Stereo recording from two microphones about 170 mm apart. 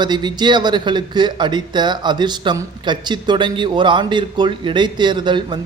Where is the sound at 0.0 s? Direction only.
25° right (ahead or behind).